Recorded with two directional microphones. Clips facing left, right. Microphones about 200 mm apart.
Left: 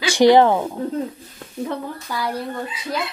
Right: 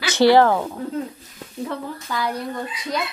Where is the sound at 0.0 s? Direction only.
15° left (ahead or behind).